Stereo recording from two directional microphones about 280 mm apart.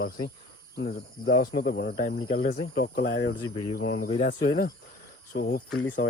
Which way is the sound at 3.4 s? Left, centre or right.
Centre.